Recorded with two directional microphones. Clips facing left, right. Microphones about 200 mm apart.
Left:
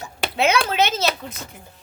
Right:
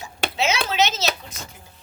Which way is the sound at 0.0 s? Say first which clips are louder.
Left 3 dB; 55° left (ahead or behind).